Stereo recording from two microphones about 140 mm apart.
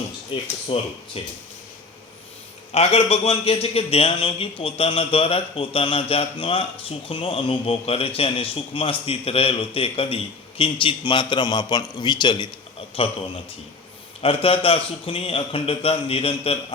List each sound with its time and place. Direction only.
0.3 s a man's voice: 40° left (ahead or behind)
2.7 s a man's voice: 45° left (ahead or behind)
13.0 s a man's voice: 45° left (ahead or behind)
14.2 s a man's voice: 40° left (ahead or behind)